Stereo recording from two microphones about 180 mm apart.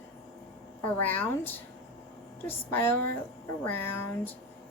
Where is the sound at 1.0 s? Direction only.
10° left (ahead or behind).